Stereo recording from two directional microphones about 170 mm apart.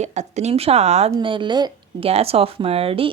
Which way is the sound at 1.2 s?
30° right (ahead or behind).